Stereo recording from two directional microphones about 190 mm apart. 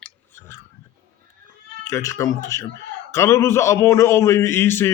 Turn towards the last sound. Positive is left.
turn(degrees=15)  # may be behind; listen again after turning